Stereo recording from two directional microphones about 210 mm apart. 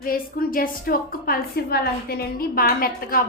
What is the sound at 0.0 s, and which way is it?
A woman's voice, 45° left (ahead or behind).